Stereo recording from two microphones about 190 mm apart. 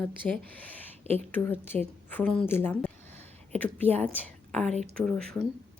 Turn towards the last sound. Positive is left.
turn(degrees=5)  # may be behind; listen again after turning